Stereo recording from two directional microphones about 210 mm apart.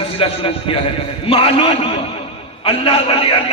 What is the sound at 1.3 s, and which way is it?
A man's voice, 25° left (ahead or behind).